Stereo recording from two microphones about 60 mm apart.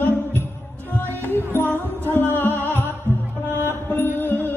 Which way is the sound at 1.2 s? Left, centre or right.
Left.